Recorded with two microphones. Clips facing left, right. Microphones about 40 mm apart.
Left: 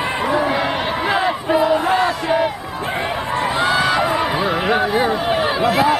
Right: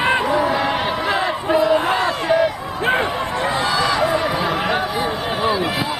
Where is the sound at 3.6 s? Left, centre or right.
Left.